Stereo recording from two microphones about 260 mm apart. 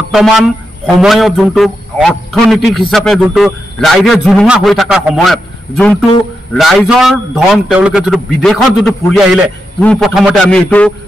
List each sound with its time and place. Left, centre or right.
0.1 s a man's voice: centre